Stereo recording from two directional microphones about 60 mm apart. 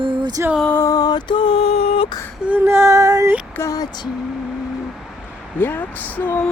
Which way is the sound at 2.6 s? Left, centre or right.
Right.